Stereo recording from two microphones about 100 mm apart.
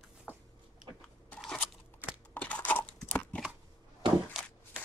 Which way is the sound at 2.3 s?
15° left (ahead or behind).